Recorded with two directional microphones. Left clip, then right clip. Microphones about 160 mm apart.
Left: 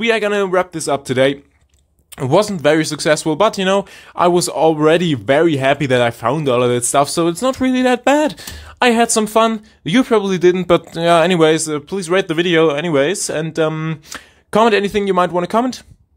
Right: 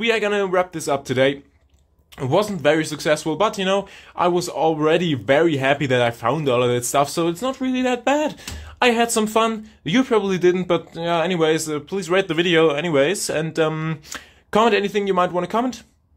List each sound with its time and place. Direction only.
0.0 s speech: 20° left (ahead or behind)
10.9 s speech: 35° left (ahead or behind)
11.5 s speech: 20° left (ahead or behind)